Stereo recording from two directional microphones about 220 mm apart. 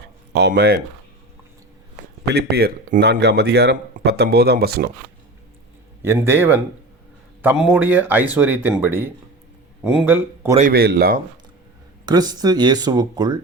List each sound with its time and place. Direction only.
0.3 s speech: 50° right (ahead or behind)
2.2 s speech: 50° right (ahead or behind)
6.0 s speech: 10° right (ahead or behind)
10.7 s speech: 45° right (ahead or behind)
12.0 s speech: 20° right (ahead or behind)